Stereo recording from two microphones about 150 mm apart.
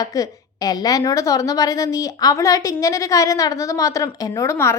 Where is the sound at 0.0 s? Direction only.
25° left (ahead or behind).